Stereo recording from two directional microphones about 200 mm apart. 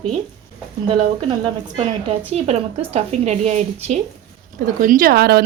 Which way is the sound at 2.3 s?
30° right (ahead or behind).